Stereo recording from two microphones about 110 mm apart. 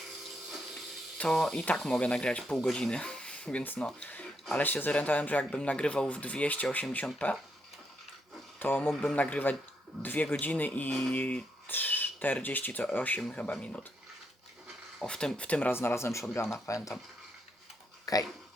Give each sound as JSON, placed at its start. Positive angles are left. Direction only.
{"t": 1.2, "sound": "speech", "side_deg": 5}
{"t": 8.5, "sound": "speech", "side_deg": 15}
{"t": 15.0, "sound": "speech", "side_deg": 5}
{"t": 18.0, "sound": "a sound", "side_deg": 35}